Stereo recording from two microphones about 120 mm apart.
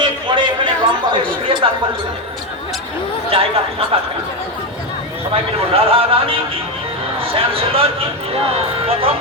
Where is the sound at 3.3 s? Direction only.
50° right (ahead or behind).